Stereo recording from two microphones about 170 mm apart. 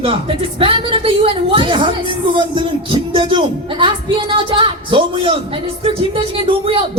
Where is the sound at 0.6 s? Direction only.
30° right (ahead or behind).